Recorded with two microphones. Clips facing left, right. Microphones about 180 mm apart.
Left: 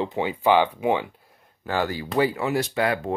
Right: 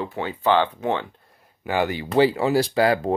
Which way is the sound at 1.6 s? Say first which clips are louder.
Right 2 dB; 20° right (ahead or behind).